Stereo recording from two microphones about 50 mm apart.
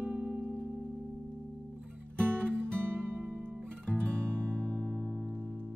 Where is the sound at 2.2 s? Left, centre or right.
Right.